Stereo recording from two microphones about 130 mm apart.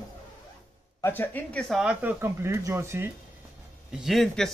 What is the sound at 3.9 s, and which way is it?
Speech, centre (ahead or behind).